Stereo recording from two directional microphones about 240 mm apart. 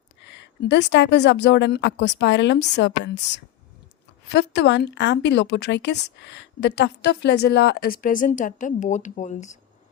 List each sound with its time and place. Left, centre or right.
0.6 s speech: left